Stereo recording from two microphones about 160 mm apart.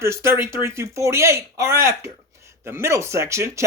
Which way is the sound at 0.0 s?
15° right (ahead or behind).